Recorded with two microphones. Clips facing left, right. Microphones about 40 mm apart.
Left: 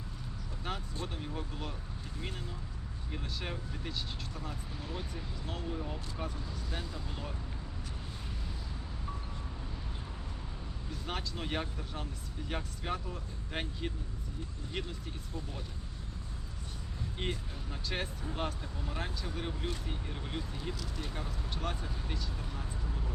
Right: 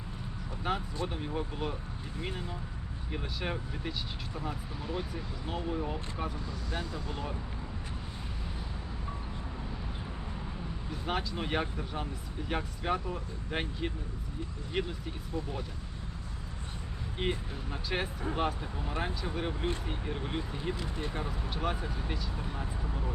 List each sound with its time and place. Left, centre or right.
0.7 s speech: centre
11.0 s speech: centre
17.2 s speech: centre
22.4 s vehicle: right